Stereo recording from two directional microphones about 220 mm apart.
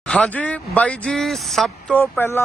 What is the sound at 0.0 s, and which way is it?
Speech, 5° left (ahead or behind).